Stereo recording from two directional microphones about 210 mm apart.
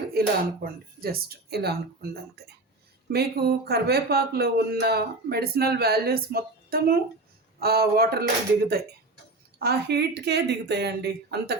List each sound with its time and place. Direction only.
0.1 s speech: 45° right (ahead or behind)
9.6 s speech: 50° right (ahead or behind)